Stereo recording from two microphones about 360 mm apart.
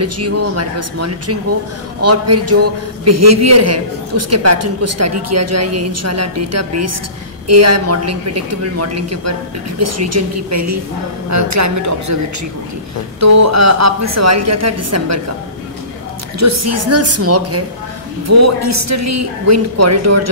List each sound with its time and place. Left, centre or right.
0.0 s a man's voice: right
13.2 s a man's voice: right
16.3 s a man's voice: right